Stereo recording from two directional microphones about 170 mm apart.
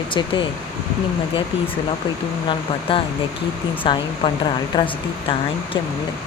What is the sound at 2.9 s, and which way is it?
Speech, 30° left (ahead or behind).